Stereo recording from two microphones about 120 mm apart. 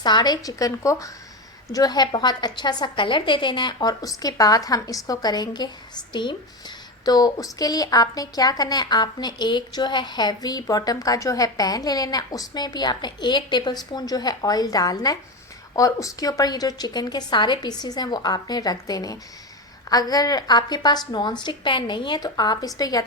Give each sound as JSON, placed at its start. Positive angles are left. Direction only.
{"t": 0.0, "sound": "a woman's voice", "side_deg": 35}